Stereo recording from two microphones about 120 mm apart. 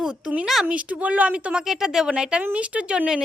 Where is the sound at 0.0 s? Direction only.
10° right (ahead or behind).